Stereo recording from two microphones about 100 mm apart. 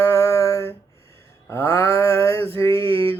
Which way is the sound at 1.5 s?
25° left (ahead or behind).